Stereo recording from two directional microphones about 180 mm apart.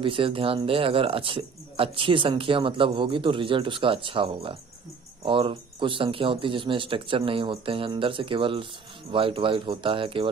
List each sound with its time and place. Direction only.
0.0 s speech: 30° right (ahead or behind)